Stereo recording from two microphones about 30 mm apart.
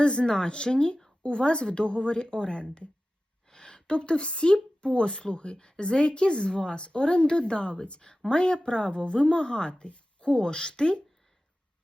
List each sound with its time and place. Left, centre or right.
0.0 s a woman's voice: left